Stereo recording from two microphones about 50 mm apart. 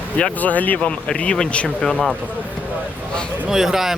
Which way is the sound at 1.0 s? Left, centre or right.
Centre.